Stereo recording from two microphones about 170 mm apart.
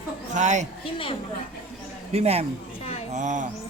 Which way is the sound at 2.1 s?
35° right (ahead or behind).